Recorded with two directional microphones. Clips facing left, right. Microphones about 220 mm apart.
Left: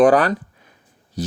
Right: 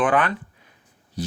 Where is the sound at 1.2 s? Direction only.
40° left (ahead or behind).